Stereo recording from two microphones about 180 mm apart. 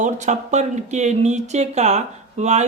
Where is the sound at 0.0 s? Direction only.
40° right (ahead or behind).